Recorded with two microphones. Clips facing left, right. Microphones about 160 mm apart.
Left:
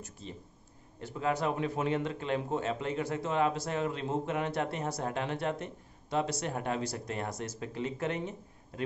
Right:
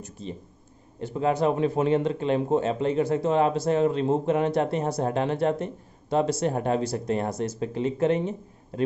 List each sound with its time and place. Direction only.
1.0 s speech: 25° right (ahead or behind)